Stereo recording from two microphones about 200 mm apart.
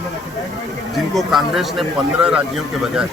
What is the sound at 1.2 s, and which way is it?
A man's voice, centre (ahead or behind).